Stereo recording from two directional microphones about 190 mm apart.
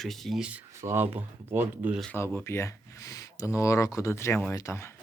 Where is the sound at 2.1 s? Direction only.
10° left (ahead or behind).